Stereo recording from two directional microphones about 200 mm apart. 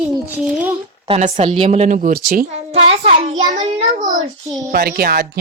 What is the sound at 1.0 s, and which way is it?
A child's voice, 30° right (ahead or behind).